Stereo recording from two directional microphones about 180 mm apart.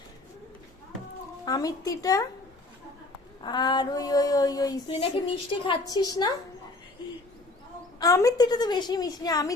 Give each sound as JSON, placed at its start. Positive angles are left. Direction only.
{"t": 1.5, "sound": "a woman's voice", "side_deg": 20}
{"t": 3.4, "sound": "a woman's voice", "side_deg": 25}
{"t": 7.9, "sound": "a woman's voice", "side_deg": 20}